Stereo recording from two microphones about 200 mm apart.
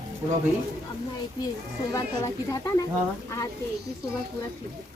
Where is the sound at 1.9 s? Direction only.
15° left (ahead or behind).